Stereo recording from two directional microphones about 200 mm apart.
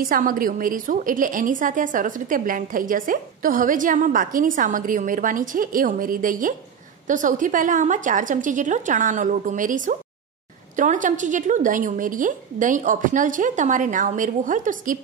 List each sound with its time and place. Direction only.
0.0 s a woman's voice: 45° right (ahead or behind)